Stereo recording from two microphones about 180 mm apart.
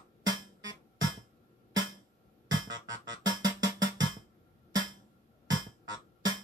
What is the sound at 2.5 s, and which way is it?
Music, 20° right (ahead or behind).